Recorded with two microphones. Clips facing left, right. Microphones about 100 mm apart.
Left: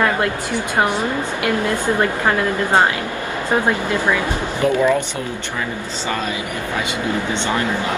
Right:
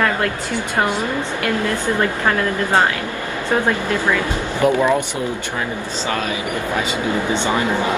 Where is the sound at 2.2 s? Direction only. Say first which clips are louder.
Left 1 dB; 15° left (ahead or behind).